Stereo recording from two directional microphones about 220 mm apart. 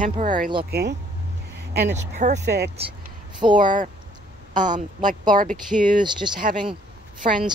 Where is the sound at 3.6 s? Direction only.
35° right (ahead or behind).